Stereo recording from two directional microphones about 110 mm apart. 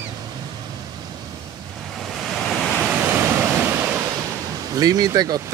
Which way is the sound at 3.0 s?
15° right (ahead or behind).